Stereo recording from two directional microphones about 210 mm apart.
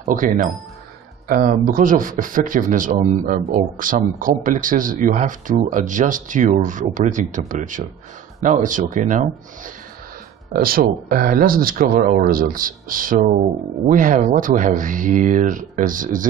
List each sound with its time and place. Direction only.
0.0 s a man's voice: 40° right (ahead or behind)
10.5 s a man's voice: 45° right (ahead or behind)